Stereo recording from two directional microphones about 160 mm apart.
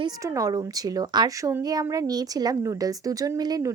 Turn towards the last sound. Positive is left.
turn(degrees=-25)  # may be behind; listen again after turning